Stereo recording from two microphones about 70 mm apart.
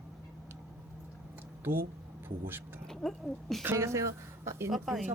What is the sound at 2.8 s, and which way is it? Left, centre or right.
Speech, centre.